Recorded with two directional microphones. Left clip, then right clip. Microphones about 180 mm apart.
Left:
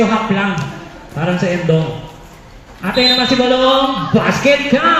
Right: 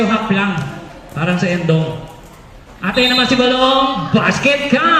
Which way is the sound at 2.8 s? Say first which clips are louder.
Left 1 dB; 10° left (ahead or behind).